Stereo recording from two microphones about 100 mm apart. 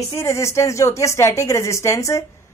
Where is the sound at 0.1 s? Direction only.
30° left (ahead or behind).